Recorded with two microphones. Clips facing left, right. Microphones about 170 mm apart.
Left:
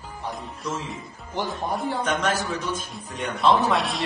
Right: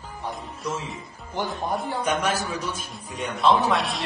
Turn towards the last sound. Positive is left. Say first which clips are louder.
# even
turn(degrees=0)  # may be behind; listen again after turning